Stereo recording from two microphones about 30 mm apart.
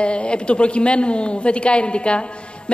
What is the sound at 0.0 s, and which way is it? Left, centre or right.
A man's voice, left.